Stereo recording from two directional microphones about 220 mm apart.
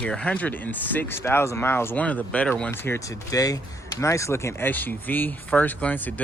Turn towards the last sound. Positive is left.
turn(degrees=5)  # may be behind; listen again after turning